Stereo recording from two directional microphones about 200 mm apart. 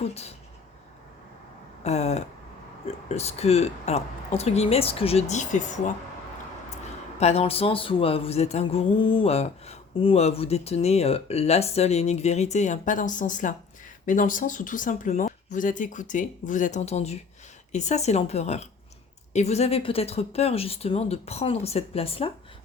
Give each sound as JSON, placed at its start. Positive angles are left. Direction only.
{"t": 0.0, "sound": "speech", "side_deg": 30}
{"t": 1.8, "sound": "speech", "side_deg": 35}
{"t": 7.2, "sound": "speech", "side_deg": 30}